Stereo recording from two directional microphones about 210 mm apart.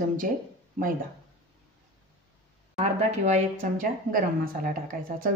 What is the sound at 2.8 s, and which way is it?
Speech, 35° right (ahead or behind).